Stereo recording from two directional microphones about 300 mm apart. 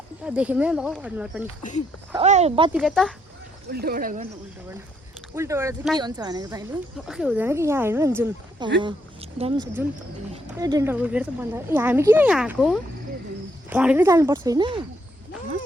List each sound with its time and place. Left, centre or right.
0.3 s speech: centre
2.1 s speech: right
2.7 s speech: centre
3.7 s speech: right
5.3 s speech: centre